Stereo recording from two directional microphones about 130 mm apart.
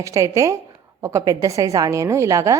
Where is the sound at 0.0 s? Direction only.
25° right (ahead or behind).